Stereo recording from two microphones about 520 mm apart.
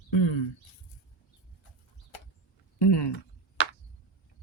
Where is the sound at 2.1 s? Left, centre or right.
Left.